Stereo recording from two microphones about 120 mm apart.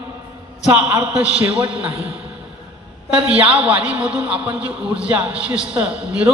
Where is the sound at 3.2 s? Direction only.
55° right (ahead or behind).